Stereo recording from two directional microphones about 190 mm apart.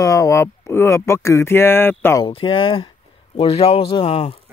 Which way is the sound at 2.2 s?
25° left (ahead or behind).